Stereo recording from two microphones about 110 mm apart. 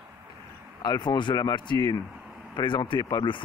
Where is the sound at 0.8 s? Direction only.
40° left (ahead or behind).